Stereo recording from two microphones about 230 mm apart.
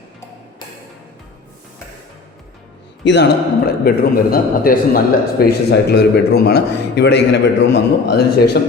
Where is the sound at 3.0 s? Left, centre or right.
Left.